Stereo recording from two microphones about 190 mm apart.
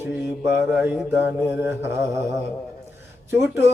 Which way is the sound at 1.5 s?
15° right (ahead or behind).